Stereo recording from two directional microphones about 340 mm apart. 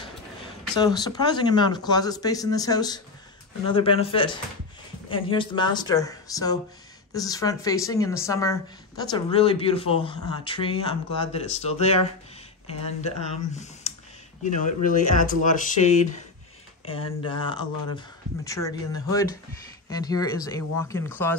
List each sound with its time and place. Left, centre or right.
0.7 s speech: centre
13.9 s a sound: centre
14.4 s speech: left